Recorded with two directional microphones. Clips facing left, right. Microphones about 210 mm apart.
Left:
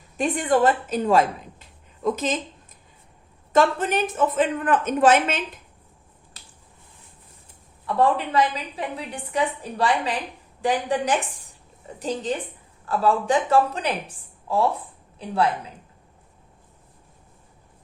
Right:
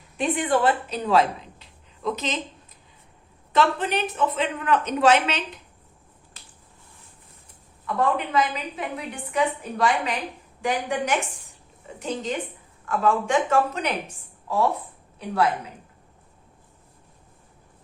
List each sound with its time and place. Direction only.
0.2 s a woman's voice: 45° left (ahead or behind)
3.5 s speech: 45° left (ahead or behind)
7.9 s a woman's voice: 35° left (ahead or behind)